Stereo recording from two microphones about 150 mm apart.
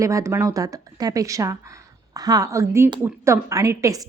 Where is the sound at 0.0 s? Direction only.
20° right (ahead or behind).